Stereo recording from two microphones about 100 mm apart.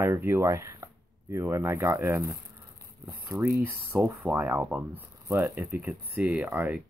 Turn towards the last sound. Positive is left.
turn(degrees=-15)  # may be behind; listen again after turning